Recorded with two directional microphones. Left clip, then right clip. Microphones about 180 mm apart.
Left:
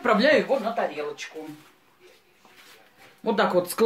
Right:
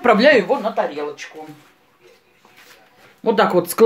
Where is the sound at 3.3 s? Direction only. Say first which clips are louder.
Right 7 dB; 40° right (ahead or behind).